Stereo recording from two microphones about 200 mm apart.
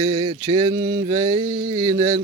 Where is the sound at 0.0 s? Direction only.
25° right (ahead or behind).